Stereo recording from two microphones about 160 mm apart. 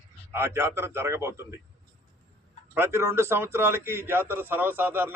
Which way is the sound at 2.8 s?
15° right (ahead or behind).